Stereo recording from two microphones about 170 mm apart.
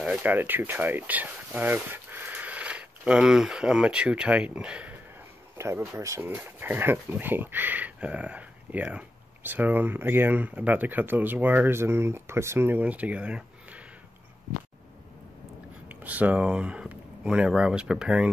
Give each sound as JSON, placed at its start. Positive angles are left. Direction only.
{"t": 0.0, "sound": "speech", "side_deg": -10}
{"t": 15.9, "sound": "speech", "side_deg": -10}